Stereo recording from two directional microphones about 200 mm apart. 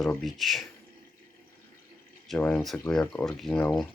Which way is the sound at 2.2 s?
5° left (ahead or behind).